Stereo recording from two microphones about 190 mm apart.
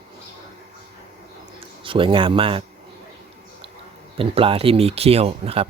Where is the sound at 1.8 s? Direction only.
25° right (ahead or behind).